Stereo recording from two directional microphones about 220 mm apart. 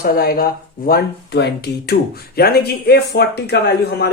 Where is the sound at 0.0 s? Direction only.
45° left (ahead or behind).